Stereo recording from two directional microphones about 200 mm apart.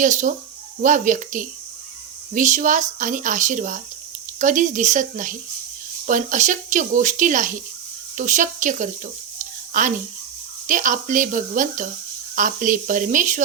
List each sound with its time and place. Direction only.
0.0 s speech: 40° right (ahead or behind)